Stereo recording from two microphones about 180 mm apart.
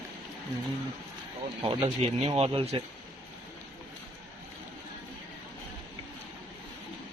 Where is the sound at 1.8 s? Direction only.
35° right (ahead or behind).